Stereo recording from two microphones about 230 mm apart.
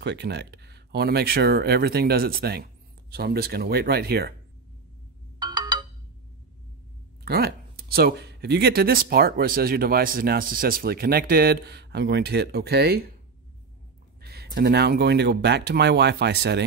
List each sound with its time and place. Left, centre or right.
0.0 s speech: right
5.4 s ringtone: centre
7.2 s speech: right
14.2 s speech: right